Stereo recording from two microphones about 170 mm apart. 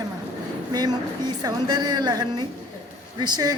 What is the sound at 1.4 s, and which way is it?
A woman's voice, 25° right (ahead or behind).